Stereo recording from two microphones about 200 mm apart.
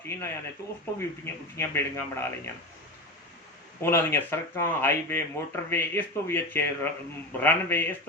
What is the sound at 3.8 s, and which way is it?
Speech, 10° left (ahead or behind).